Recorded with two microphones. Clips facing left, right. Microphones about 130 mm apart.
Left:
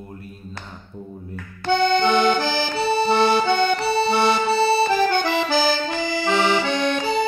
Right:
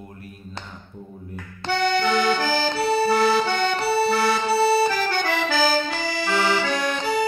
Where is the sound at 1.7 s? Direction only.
25° left (ahead or behind).